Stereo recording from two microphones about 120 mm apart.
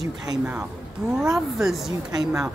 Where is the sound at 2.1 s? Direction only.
30° right (ahead or behind).